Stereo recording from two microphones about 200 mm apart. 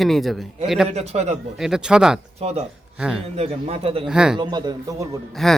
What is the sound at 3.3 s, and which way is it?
Speech, 30° right (ahead or behind).